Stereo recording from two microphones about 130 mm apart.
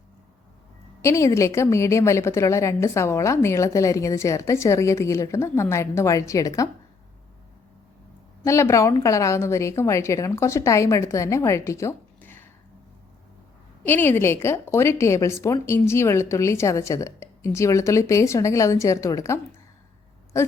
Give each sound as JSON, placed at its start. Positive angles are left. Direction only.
{"t": 1.0, "sound": "a woman's voice", "side_deg": 20}
{"t": 8.4, "sound": "a woman's voice", "side_deg": 20}
{"t": 13.8, "sound": "a woman's voice", "side_deg": 15}